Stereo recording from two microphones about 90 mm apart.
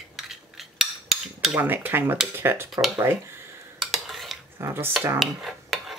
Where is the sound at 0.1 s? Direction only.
5° right (ahead or behind).